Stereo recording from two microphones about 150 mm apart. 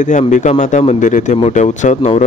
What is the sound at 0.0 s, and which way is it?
Speech, 55° left (ahead or behind).